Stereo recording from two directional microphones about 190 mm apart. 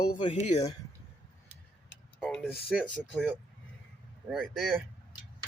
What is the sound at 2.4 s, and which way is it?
Speech, centre (ahead or behind).